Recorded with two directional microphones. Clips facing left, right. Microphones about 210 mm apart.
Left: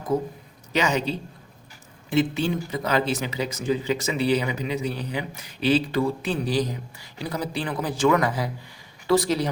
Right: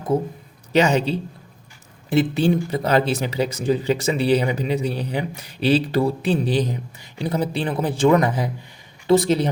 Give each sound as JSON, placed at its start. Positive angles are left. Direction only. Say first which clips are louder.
{"t": 0.1, "sound": "speech", "louder": "right 3 dB", "side_deg": -25}